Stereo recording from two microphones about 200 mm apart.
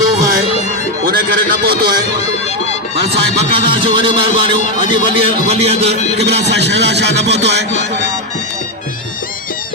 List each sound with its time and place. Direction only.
0.0 s music: 50° right (ahead or behind)
1.6 s speech: 50° right (ahead or behind)
3.5 s a man's voice: 25° right (ahead or behind)
6.2 s a man's voice: 60° right (ahead or behind)